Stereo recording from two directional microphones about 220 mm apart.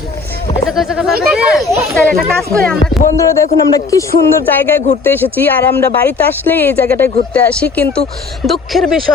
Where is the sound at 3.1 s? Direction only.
15° left (ahead or behind).